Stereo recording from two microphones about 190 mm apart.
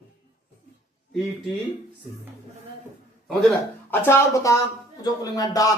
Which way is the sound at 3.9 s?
15° left (ahead or behind).